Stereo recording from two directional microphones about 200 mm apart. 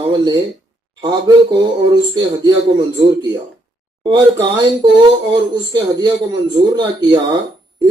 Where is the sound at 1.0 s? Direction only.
20° right (ahead or behind).